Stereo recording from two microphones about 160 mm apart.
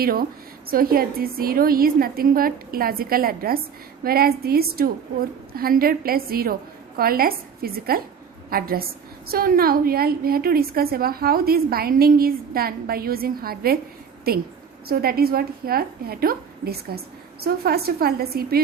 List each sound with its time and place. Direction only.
0.0 s a woman's voice: 65° right (ahead or behind)